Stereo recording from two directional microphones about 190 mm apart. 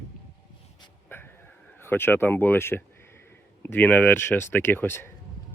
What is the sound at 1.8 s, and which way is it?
Speech, 10° left (ahead or behind).